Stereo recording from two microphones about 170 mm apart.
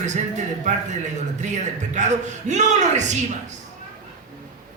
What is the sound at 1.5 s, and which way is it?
A man's voice, 45° right (ahead or behind).